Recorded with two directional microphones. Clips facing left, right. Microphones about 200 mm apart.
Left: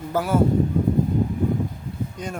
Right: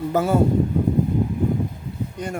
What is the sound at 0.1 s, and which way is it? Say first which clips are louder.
Speech: right 2 dB; 20° right (ahead or behind).